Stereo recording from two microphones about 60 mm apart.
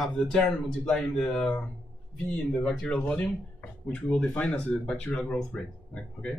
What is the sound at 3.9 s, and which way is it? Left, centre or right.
Speech, left.